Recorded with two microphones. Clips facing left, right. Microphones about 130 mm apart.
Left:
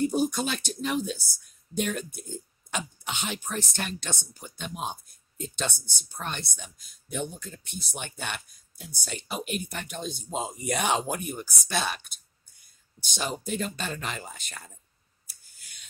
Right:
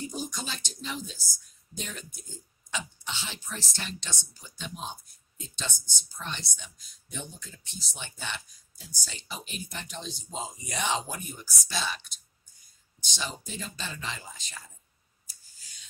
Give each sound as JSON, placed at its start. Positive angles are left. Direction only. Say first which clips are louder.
{"t": 0.0, "sound": "a woman's voice", "louder": "left 11 dB", "side_deg": 55}
{"t": 15.2, "sound": "clicking", "louder": "left 2 dB", "side_deg": 60}